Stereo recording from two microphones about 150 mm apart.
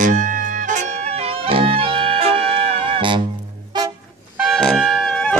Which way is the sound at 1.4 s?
40° right (ahead or behind).